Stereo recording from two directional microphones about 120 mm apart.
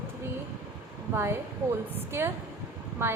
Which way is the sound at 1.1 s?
20° right (ahead or behind).